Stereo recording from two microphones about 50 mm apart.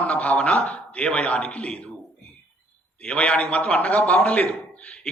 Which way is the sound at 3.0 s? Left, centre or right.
Left.